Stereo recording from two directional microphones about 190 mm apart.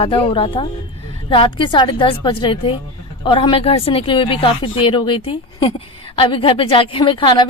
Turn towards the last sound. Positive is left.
turn(degrees=25)  # may be behind; listen again after turning